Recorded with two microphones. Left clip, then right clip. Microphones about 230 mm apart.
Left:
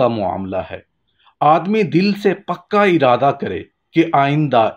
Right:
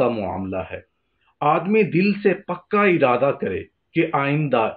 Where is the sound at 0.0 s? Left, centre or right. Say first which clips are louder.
Left 5 dB; left.